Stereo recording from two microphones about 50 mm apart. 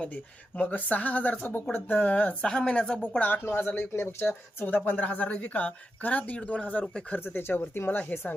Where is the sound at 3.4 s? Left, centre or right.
Left.